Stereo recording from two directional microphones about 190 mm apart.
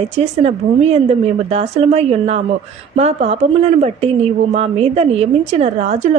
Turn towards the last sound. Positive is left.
turn(degrees=-35)  # may be behind; listen again after turning